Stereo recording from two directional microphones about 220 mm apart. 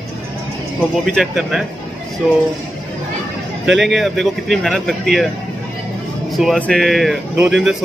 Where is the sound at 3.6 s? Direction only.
Centre (ahead or behind).